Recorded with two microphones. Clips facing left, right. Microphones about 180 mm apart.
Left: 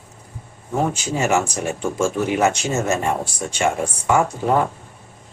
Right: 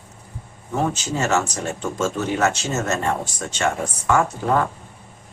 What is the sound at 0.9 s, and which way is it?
Speech, 10° left (ahead or behind).